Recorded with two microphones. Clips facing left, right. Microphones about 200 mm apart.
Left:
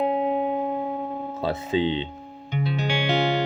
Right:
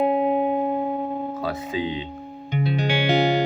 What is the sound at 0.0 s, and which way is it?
Music, 10° right (ahead or behind).